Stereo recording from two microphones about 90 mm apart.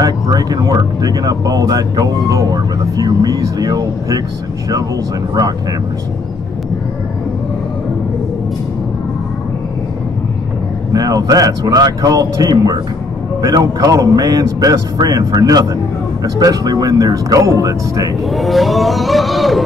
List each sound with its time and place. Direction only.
0.0 s speech: 45° right (ahead or behind)
10.9 s speech: 45° right (ahead or behind)
18.3 s a sound: centre (ahead or behind)